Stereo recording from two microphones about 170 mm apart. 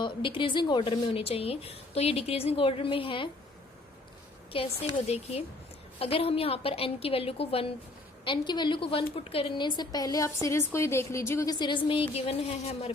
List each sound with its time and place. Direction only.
0.0 s a woman's voice: 30° left (ahead or behind)
4.5 s a woman's voice: 35° left (ahead or behind)